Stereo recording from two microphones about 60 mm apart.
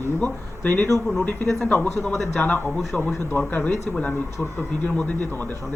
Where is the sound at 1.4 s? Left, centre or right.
Centre.